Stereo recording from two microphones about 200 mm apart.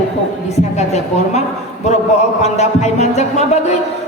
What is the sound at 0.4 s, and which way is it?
A man's voice, 35° left (ahead or behind).